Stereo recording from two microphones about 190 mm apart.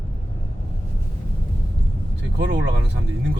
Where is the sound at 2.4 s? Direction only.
65° right (ahead or behind).